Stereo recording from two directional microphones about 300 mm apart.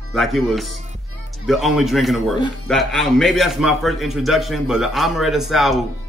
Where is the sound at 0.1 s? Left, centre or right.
Centre.